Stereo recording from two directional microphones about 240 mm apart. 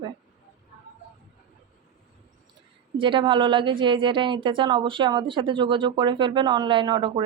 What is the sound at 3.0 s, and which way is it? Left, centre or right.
A woman's voice, right.